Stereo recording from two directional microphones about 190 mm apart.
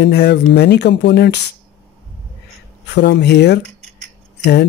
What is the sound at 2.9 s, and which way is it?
Speech, 65° left (ahead or behind).